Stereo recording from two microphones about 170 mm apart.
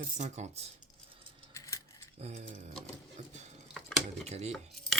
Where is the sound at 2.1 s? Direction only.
40° right (ahead or behind).